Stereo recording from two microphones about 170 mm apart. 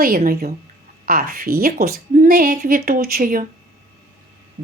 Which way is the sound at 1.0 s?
60° right (ahead or behind).